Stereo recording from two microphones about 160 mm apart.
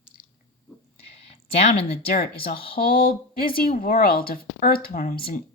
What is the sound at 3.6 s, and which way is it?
Speech, 65° left (ahead or behind).